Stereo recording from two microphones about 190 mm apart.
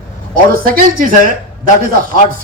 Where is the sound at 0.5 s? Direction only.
50° right (ahead or behind).